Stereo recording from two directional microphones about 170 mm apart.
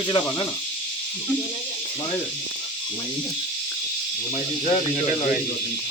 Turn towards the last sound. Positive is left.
turn(degrees=40)  # may be behind; listen again after turning